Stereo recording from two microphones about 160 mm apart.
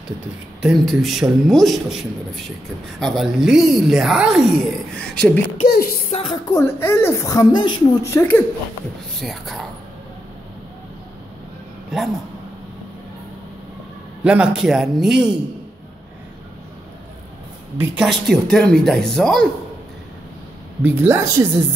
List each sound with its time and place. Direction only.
0.6 s speech: centre (ahead or behind)
5.7 s a sound: 70° left (ahead or behind)
6.0 s a woman's voice: 40° left (ahead or behind)
6.5 s speech: 15° left (ahead or behind)
8.1 s a woman's voice: 10° left (ahead or behind)
9.2 s speech: centre (ahead or behind)
11.9 s speech: 5° right (ahead or behind)
14.2 s speech: 5° right (ahead or behind)
17.7 s speech: 5° right (ahead or behind)
20.8 s speech: 10° right (ahead or behind)